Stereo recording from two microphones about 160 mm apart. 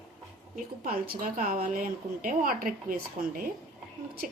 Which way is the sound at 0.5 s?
65° right (ahead or behind).